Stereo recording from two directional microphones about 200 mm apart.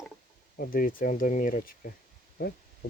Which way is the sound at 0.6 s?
45° left (ahead or behind).